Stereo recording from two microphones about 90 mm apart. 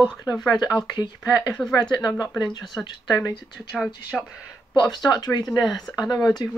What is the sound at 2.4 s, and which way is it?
Speech, 50° left (ahead or behind).